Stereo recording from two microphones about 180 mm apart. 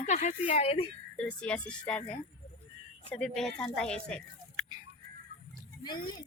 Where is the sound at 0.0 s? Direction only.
40° left (ahead or behind).